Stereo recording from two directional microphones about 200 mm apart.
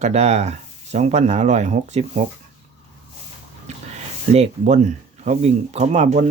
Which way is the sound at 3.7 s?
35° right (ahead or behind).